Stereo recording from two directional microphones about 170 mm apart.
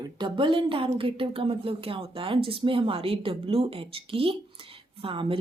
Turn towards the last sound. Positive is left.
turn(degrees=-30)  # may be behind; listen again after turning